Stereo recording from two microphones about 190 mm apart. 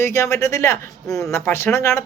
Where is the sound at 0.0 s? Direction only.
15° left (ahead or behind).